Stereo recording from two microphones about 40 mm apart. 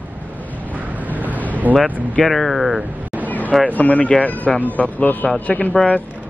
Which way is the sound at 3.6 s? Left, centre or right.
Left.